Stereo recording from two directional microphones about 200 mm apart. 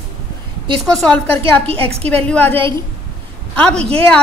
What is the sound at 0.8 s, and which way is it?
Speech, 5° left (ahead or behind).